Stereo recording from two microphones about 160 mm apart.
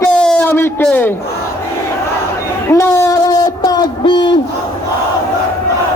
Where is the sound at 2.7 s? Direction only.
15° left (ahead or behind).